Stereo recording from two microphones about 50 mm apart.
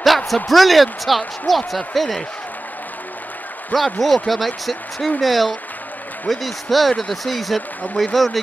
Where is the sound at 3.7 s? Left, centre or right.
Left.